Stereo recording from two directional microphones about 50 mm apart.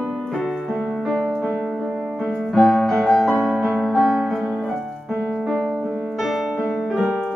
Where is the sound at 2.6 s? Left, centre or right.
Centre.